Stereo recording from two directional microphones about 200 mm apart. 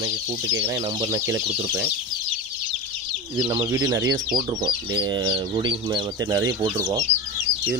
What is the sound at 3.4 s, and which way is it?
Speech, 20° right (ahead or behind).